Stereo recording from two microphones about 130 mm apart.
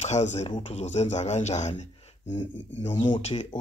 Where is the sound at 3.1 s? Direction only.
55° left (ahead or behind).